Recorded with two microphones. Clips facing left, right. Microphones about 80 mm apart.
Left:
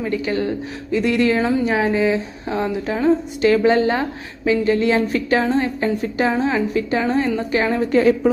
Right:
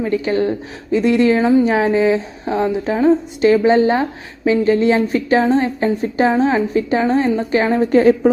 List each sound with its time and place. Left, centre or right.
0.0 s a woman's voice: right